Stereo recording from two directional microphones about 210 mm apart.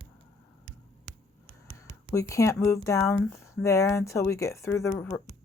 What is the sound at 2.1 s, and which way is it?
Speech, 15° left (ahead or behind).